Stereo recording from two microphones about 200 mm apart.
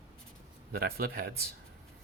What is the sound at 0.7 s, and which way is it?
Speech, 50° right (ahead or behind).